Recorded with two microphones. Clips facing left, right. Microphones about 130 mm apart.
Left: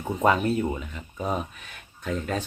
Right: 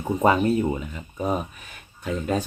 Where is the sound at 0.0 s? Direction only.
10° right (ahead or behind).